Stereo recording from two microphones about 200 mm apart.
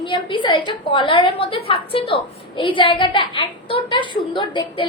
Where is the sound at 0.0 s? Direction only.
25° left (ahead or behind).